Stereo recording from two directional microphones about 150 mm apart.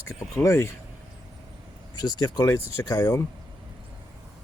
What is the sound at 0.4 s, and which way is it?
Speech, 20° left (ahead or behind).